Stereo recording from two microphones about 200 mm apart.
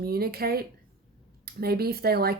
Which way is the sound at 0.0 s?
50° right (ahead or behind).